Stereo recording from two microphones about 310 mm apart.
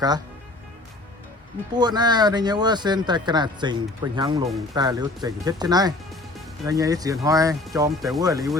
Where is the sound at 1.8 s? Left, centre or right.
Centre.